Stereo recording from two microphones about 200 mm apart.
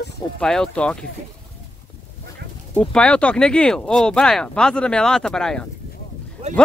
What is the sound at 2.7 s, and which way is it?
Speech, 5° left (ahead or behind).